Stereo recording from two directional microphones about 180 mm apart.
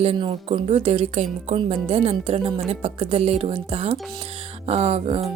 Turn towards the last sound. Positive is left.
turn(degrees=-35)  # may be behind; listen again after turning